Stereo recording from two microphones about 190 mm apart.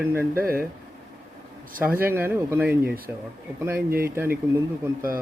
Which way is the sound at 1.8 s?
10° right (ahead or behind).